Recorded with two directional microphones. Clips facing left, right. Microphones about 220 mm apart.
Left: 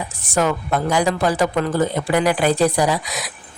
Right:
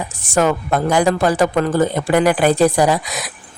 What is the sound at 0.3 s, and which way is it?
Speech, 50° right (ahead or behind).